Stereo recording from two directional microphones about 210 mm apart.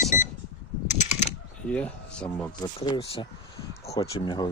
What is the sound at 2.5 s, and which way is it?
Speech, 20° left (ahead or behind).